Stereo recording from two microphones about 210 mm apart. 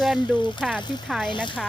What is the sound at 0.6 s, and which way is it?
Speech, centre (ahead or behind).